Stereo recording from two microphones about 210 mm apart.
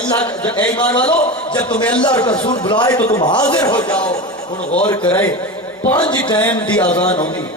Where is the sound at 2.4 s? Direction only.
25° left (ahead or behind).